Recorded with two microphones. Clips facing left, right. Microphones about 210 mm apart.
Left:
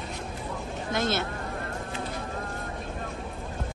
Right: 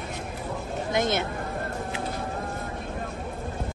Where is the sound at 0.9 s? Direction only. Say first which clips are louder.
Right 2 dB; 20° right (ahead or behind).